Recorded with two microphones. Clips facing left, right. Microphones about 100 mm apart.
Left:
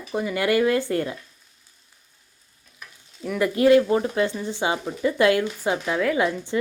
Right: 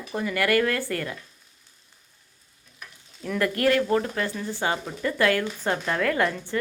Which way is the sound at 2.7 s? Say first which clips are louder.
Left 2 dB; 5° left (ahead or behind).